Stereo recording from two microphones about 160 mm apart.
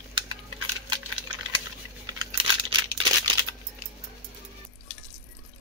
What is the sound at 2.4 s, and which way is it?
Crumpling, 30° right (ahead or behind).